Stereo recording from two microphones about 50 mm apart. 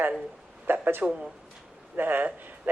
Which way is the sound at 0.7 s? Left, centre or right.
Right.